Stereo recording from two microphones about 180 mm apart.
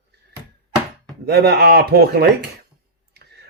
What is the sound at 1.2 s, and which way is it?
Speech, 60° right (ahead or behind).